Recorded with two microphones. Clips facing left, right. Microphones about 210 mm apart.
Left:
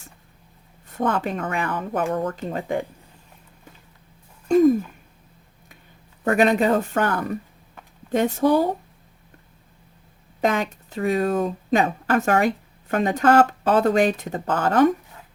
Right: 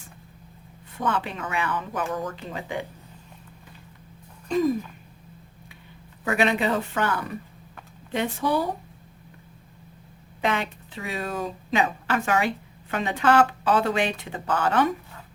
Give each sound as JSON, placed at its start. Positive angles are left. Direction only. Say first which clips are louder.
{"t": 0.9, "sound": "speech", "louder": "left 4 dB", "side_deg": 45}
{"t": 4.4, "sound": "a sound", "louder": "left 7 dB", "side_deg": 50}
{"t": 6.2, "sound": "speech", "louder": "left 5 dB", "side_deg": 45}
{"t": 10.4, "sound": "speech", "louder": "left 4 dB", "side_deg": 45}